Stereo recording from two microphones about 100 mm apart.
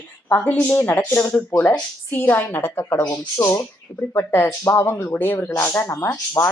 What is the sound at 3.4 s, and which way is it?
Speech, 40° left (ahead or behind).